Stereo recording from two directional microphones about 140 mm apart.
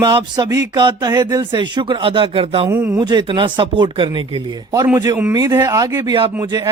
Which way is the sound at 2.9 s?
30° right (ahead or behind).